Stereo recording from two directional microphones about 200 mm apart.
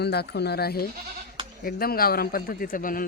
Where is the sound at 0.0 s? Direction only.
55° left (ahead or behind).